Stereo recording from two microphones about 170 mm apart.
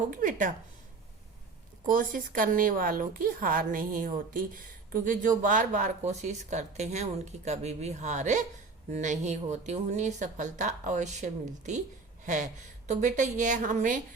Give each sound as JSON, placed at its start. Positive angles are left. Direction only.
{"t": 0.1, "sound": "a woman's voice", "side_deg": -50}
{"t": 1.9, "sound": "a woman's voice", "side_deg": -55}
{"t": 12.2, "sound": "a sound", "side_deg": -45}
{"t": 12.9, "sound": "a woman's voice", "side_deg": -45}